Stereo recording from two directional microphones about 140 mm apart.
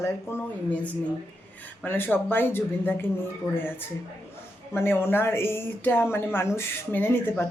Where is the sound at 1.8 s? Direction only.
15° left (ahead or behind).